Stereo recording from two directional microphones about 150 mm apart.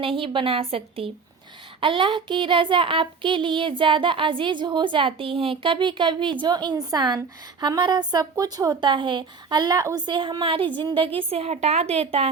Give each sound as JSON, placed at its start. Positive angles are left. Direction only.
{"t": 0.0, "sound": "a woman's voice", "side_deg": -35}
{"t": 10.1, "sound": "speech", "side_deg": -35}